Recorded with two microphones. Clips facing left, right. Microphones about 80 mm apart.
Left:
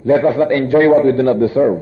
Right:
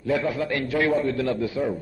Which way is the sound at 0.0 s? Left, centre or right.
Left.